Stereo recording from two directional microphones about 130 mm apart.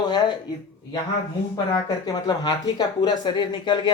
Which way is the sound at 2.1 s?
30° left (ahead or behind).